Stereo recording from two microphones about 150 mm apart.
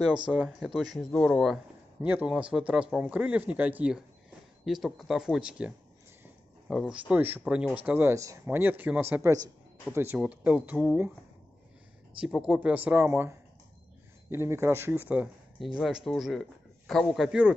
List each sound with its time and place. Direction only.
0.3 s speech: centre (ahead or behind)
2.0 s speech: 10° right (ahead or behind)
6.7 s a man's voice: 5° right (ahead or behind)
12.2 s speech: 5° right (ahead or behind)
15.6 s speech: centre (ahead or behind)